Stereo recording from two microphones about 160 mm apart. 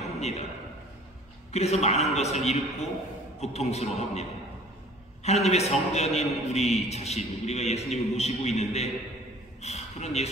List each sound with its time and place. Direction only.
0.2 s a man's voice: 45° left (ahead or behind)
1.5 s a man's voice: 40° left (ahead or behind)